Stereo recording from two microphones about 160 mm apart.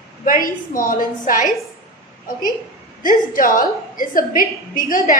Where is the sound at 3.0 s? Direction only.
60° left (ahead or behind).